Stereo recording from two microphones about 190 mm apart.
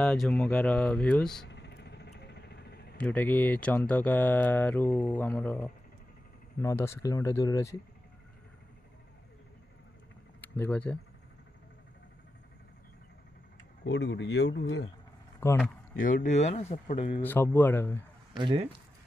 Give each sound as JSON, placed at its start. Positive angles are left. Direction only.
{"t": 0.0, "sound": "speech", "side_deg": 5}
{"t": 1.5, "sound": "vehicle", "side_deg": 65}
{"t": 3.0, "sound": "speech", "side_deg": 10}
{"t": 10.4, "sound": "speech", "side_deg": 10}
{"t": 13.8, "sound": "speech", "side_deg": 70}
{"t": 15.4, "sound": "speech", "side_deg": 10}
{"t": 16.0, "sound": "speech", "side_deg": 45}
{"t": 17.2, "sound": "speech", "side_deg": 10}
{"t": 18.3, "sound": "speech", "side_deg": -25}